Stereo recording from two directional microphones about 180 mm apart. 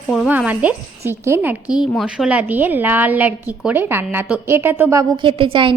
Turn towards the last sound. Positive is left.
turn(degrees=-30)  # may be behind; listen again after turning